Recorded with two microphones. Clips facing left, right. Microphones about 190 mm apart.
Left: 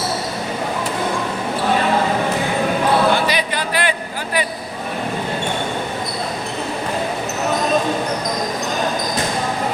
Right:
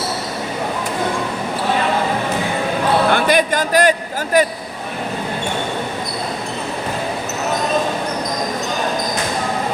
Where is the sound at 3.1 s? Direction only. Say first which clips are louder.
Right 4 dB; 50° right (ahead or behind).